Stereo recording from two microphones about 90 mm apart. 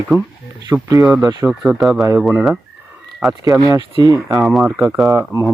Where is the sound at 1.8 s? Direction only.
Centre (ahead or behind).